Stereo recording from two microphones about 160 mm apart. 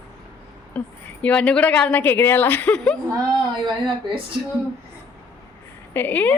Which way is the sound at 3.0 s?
25° right (ahead or behind).